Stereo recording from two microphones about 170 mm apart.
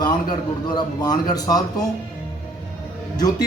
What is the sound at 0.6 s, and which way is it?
A man's voice, 25° left (ahead or behind).